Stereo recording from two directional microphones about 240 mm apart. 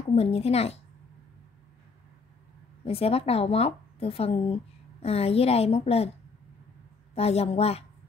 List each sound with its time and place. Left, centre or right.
0.1 s a woman's voice: left
2.8 s a woman's voice: left
7.2 s a woman's voice: left